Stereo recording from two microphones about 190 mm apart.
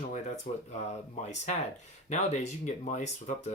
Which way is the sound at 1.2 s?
35° left (ahead or behind).